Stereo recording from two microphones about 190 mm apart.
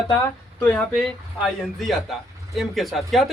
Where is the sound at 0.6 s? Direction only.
5° left (ahead or behind).